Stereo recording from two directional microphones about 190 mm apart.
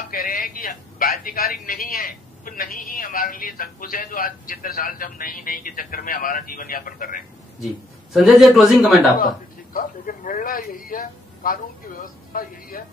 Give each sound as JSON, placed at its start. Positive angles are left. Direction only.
{"t": 0.1, "sound": "a man's voice", "side_deg": 50}
{"t": 8.1, "sound": "a man's voice", "side_deg": 0}
{"t": 9.8, "sound": "a man's voice", "side_deg": 45}